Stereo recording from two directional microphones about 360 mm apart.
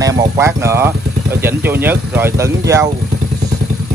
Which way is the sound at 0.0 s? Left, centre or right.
Centre.